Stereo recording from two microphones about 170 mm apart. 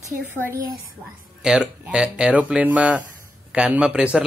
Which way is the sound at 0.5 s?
20° right (ahead or behind).